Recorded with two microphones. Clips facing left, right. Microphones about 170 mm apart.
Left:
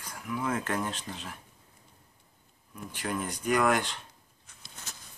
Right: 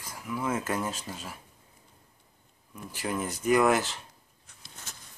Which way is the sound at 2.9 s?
5° right (ahead or behind).